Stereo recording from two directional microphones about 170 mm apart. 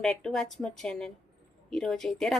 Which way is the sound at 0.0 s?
5° left (ahead or behind).